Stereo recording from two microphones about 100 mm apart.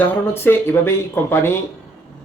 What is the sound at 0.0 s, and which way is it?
Speech, 20° left (ahead or behind).